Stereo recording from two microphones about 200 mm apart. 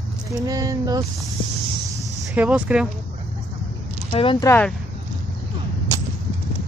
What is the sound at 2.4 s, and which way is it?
Speech, 5° right (ahead or behind).